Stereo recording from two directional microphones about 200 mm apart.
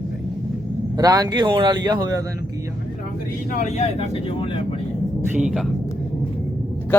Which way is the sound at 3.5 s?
35° left (ahead or behind).